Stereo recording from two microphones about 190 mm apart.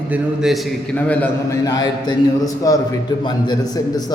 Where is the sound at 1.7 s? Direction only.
20° left (ahead or behind).